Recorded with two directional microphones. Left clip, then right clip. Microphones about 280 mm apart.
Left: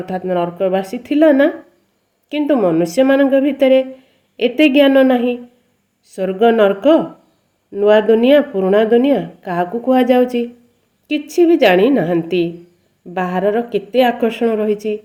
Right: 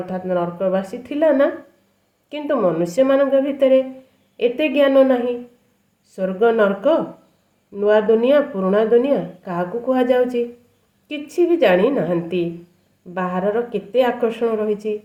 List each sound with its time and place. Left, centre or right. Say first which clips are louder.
0.0 s speech: left 3 dB; left